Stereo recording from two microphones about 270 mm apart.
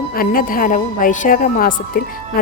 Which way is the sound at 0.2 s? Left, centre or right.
Left.